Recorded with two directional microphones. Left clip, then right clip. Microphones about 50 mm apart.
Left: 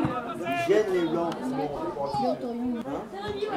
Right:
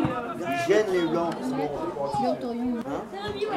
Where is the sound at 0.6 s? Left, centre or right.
Right.